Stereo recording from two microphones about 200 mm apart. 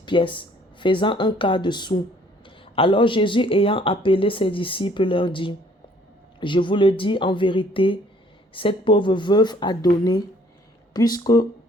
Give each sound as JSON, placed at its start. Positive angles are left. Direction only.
{"t": 0.0, "sound": "speech", "side_deg": 25}